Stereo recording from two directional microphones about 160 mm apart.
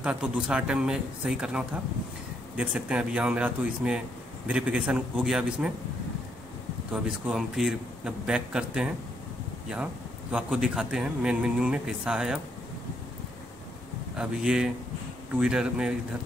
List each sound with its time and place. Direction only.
0.0 s speech: 5° right (ahead or behind)
6.9 s speech: 5° right (ahead or behind)
10.3 s speech: 5° right (ahead or behind)
14.1 s speech: 5° right (ahead or behind)